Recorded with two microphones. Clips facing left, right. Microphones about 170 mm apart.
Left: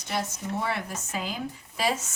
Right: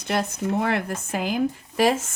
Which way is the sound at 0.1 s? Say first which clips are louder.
Right 7 dB; 60° right (ahead or behind).